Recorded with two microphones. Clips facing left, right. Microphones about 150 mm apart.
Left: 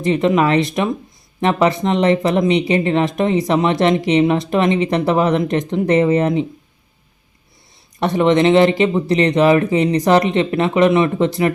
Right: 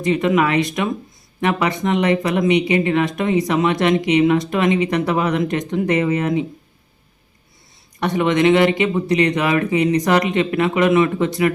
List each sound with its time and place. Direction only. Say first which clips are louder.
0.0 s speech: left 2 dB; 25° left (ahead or behind)
7.9 s speech: left 3 dB; 30° left (ahead or behind)